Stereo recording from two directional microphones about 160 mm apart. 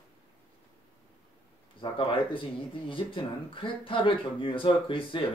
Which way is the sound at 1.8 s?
30° left (ahead or behind).